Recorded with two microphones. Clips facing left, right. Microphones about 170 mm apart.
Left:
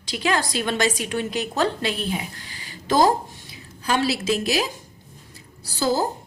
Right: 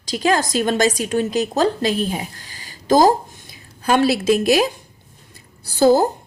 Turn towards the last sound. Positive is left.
turn(degrees=-55)  # may be behind; listen again after turning